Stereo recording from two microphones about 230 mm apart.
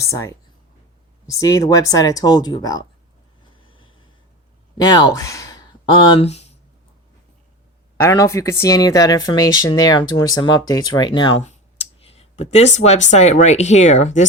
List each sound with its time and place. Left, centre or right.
0.0 s speech: centre
3.6 s a sound: left
4.8 s speech: centre
8.0 s speech: centre; by 14.3 s left